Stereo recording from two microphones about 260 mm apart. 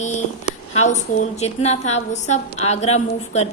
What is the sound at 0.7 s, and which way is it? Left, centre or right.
A woman's voice, left.